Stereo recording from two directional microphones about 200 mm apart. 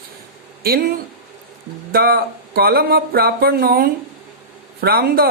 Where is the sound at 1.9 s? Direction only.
50° right (ahead or behind).